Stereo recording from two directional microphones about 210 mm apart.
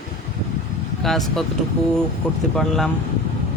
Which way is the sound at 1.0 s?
Centre (ahead or behind).